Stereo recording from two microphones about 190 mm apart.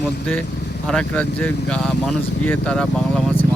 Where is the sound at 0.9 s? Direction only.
5° left (ahead or behind).